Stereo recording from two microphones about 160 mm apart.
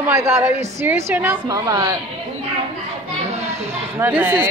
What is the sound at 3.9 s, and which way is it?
Speech, 10° right (ahead or behind).